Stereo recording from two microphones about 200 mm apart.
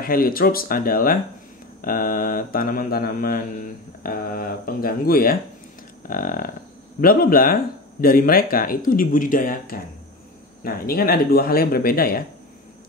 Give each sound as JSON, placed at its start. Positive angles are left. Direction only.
{"t": 0.0, "sound": "speech", "side_deg": 45}